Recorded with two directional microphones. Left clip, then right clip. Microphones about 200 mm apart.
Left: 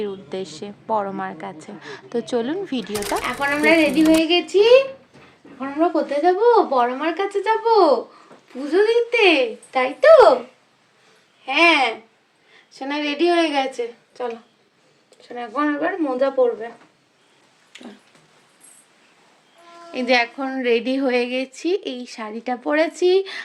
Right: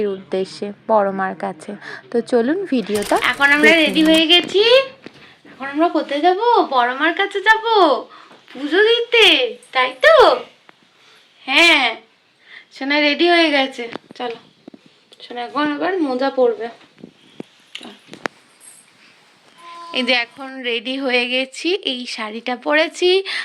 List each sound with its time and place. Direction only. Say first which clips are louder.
0.0 s speech: right 7 dB; 10° right (ahead or behind)
3.2 s a woman's voice: right 8 dB; centre (ahead or behind)
7.7 s speech: left 2 dB; 35° right (ahead or behind)
8.5 s a woman's voice: right 3 dB; 5° left (ahead or behind)
11.4 s a woman's voice: right 3 dB; centre (ahead or behind)
15.3 s a woman's voice: right 2 dB; 5° right (ahead or behind)
16.0 s speech: right 1 dB; 25° right (ahead or behind)
19.9 s a woman's voice: right 1 dB; 5° left (ahead or behind)